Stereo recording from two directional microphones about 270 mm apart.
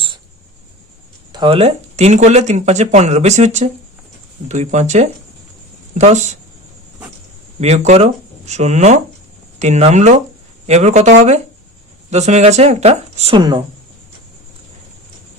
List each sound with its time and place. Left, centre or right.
1.3 s speech: centre
7.6 s speech: right
12.1 s speech: right